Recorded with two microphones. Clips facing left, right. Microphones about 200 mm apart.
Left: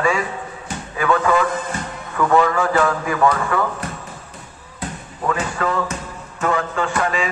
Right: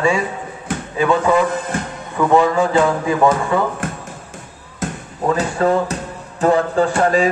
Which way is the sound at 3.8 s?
50° right (ahead or behind).